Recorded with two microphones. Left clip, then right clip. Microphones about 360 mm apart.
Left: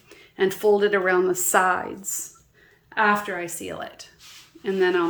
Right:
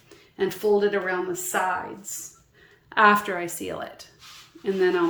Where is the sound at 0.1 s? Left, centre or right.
Centre.